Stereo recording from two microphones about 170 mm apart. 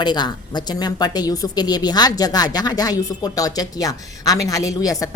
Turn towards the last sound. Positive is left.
turn(degrees=20)  # may be behind; listen again after turning